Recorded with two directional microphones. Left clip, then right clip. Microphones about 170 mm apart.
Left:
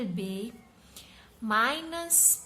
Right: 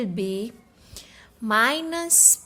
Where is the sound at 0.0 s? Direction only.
40° right (ahead or behind).